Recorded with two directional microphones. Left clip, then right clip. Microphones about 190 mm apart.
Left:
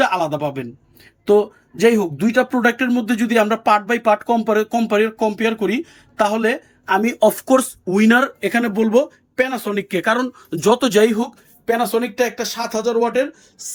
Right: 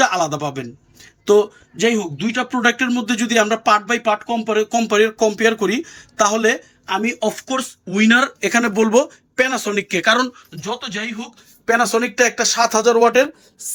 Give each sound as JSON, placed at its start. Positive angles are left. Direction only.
{"t": 0.0, "sound": "speech", "side_deg": 10}
{"t": 1.7, "sound": "speech", "side_deg": 25}
{"t": 10.6, "sound": "speech", "side_deg": 50}
{"t": 11.6, "sound": "speech", "side_deg": 5}